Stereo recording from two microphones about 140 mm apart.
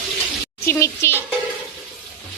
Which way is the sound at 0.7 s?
15° left (ahead or behind).